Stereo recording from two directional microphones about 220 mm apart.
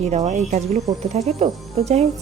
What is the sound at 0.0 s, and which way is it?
Speech, 30° right (ahead or behind).